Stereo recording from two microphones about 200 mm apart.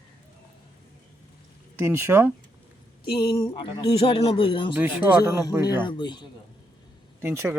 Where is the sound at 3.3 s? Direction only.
20° left (ahead or behind).